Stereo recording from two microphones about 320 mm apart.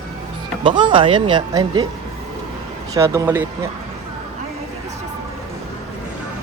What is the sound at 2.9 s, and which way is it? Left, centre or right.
Speech, centre.